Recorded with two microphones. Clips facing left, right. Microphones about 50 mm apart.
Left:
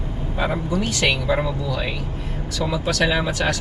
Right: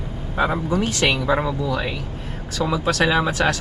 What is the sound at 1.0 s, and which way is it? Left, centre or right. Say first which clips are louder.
Speech: even; centre.